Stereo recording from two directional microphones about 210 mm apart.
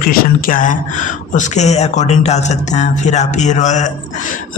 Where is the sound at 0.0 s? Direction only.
40° left (ahead or behind).